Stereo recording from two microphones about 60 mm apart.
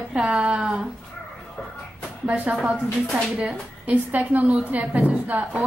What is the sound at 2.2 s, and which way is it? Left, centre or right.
A woman's voice, right.